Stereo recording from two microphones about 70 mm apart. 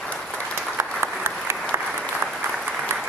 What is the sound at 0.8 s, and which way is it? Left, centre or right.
Applause, right.